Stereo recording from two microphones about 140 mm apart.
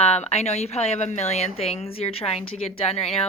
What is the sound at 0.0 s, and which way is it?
A woman's voice, 50° left (ahead or behind).